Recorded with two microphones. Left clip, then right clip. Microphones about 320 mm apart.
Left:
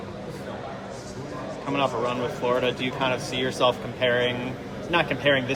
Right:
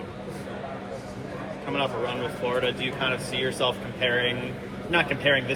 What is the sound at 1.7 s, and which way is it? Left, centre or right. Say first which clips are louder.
Speech: left 3 dB; left.